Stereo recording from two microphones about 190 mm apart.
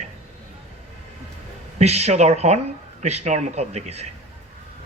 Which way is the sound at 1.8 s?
35° right (ahead or behind).